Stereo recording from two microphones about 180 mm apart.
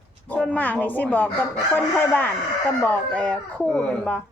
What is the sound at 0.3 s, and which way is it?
A man's voice, 10° left (ahead or behind).